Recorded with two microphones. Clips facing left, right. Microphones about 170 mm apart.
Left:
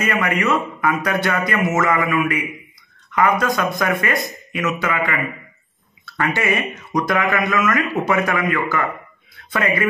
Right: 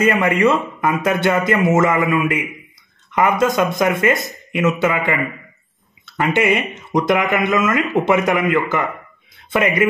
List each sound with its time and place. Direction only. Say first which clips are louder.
0.1 s a man's voice: right 4 dB; 30° right (ahead or behind)